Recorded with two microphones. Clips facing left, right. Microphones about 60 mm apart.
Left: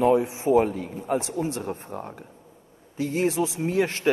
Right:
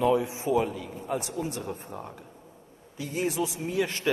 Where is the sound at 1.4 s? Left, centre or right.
Left.